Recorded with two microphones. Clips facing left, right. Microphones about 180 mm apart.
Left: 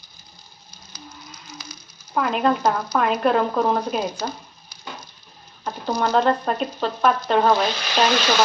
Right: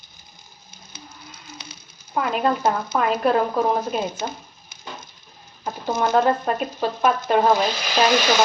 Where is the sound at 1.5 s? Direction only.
30° right (ahead or behind).